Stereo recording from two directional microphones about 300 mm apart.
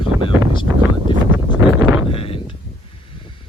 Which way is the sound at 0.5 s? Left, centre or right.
Centre.